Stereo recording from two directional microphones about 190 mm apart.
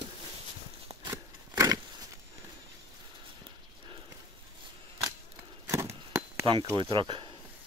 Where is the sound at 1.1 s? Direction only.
20° right (ahead or behind).